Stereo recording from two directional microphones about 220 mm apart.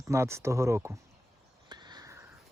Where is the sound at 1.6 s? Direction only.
20° right (ahead or behind).